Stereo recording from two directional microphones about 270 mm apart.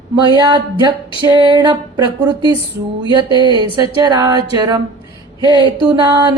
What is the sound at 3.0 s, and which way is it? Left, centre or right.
Music, centre.